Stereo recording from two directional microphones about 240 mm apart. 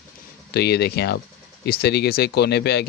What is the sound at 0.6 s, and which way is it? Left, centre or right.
Speech, left.